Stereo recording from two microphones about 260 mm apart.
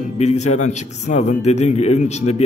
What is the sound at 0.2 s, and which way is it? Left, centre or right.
A man's voice, left.